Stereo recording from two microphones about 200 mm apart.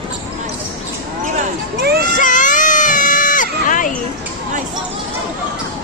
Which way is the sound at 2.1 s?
40° left (ahead or behind).